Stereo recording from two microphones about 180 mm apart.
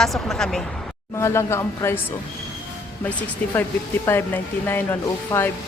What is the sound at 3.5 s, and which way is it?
Speech, 10° left (ahead or behind).